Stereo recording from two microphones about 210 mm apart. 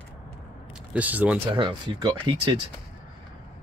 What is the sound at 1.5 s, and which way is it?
Speech, 25° right (ahead or behind).